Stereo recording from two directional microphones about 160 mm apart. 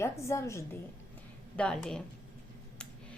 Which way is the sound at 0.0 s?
15° left (ahead or behind).